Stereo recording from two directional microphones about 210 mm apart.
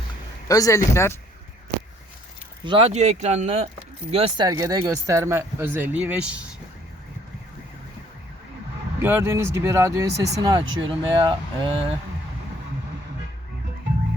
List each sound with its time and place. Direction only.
0.4 s a man's voice: 15° left (ahead or behind)
2.6 s speech: 25° right (ahead or behind); by 6.4 s 5° right (ahead or behind)
9.0 s speech: 10° right (ahead or behind)